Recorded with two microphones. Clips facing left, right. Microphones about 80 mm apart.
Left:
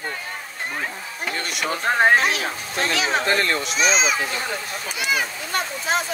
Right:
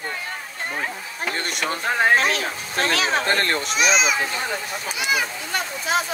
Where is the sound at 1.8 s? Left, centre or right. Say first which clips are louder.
Left 2 dB; left.